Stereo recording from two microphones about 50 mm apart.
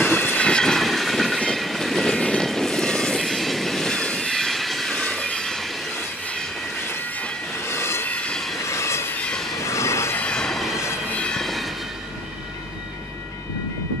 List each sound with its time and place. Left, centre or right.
0.1 s train: left
0.4 s train: centre
0.8 s train: centre
3.9 s train: centre
4.3 s vehicle: centre
5.2 s train: centre
7.6 s train: left
8.1 s train: left
8.6 s train: left
10.3 s train: centre
11.3 s a sound: centre